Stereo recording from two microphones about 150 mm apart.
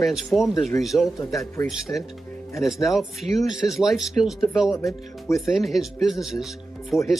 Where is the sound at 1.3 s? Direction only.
25° left (ahead or behind).